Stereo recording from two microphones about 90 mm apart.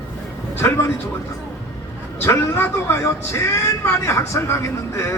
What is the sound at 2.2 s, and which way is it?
A man's voice, 30° left (ahead or behind).